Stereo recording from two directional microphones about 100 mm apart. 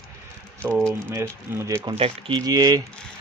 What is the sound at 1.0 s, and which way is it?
Speech, 25° right (ahead or behind).